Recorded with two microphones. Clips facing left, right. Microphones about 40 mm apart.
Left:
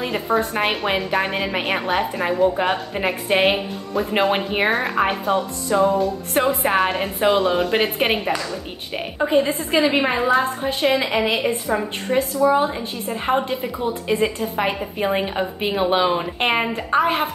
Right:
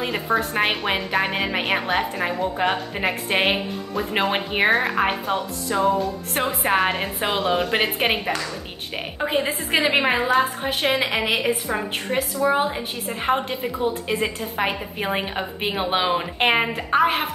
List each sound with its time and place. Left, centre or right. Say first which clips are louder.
0.0 s a woman's voice: left 2 dB; centre
9.2 s a woman's voice: left 5 dB; centre
9.7 s a woman's voice: left 1 dB; right
11.6 s a woman's voice: left 3 dB; right
13.1 s a woman's voice: left 2 dB; centre